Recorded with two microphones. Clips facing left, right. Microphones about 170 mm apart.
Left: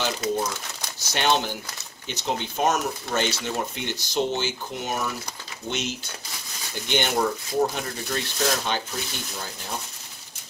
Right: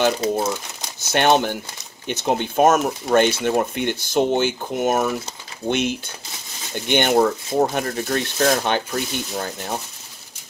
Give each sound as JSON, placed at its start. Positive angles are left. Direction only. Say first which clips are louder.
{"t": 0.2, "sound": "speech", "louder": "right 5 dB", "side_deg": -25}
{"t": 1.1, "sound": "speech", "louder": "right 7 dB", "side_deg": -55}